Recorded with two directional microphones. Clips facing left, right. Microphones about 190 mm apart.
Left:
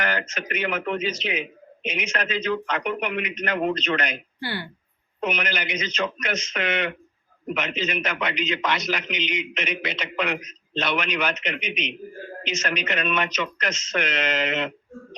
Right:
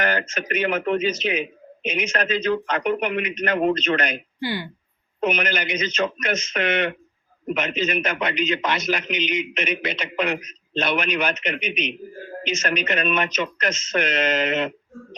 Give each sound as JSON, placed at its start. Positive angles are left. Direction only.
{"t": 0.0, "sound": "a man's voice", "side_deg": -45}
{"t": 4.4, "sound": "speech", "side_deg": -15}
{"t": 5.2, "sound": "a man's voice", "side_deg": -50}